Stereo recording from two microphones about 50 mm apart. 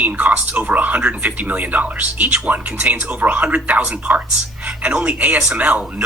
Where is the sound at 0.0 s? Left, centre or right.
Right.